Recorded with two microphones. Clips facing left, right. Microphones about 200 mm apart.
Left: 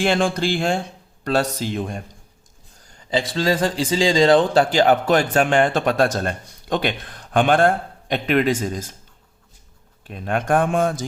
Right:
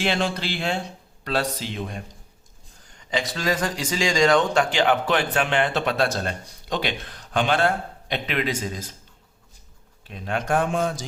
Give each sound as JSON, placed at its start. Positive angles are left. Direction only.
{"t": 0.0, "sound": "a man's voice", "side_deg": 50}
{"t": 3.1, "sound": "a man's voice", "side_deg": 30}
{"t": 10.1, "sound": "a man's voice", "side_deg": 50}